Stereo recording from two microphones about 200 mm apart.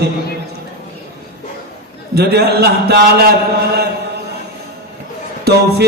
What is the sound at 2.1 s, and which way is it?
A man's voice, 55° right (ahead or behind).